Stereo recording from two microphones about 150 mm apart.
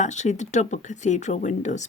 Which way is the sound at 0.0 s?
50° left (ahead or behind).